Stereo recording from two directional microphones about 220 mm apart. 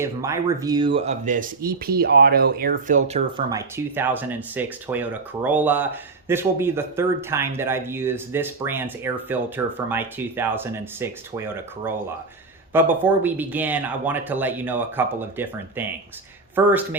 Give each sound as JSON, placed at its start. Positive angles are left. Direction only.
{"t": 0.0, "sound": "speech", "side_deg": -15}
{"t": 3.3, "sound": "speech", "side_deg": -10}